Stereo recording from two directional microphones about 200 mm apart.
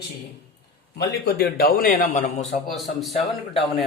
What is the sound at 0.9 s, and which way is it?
Speech, 55° left (ahead or behind).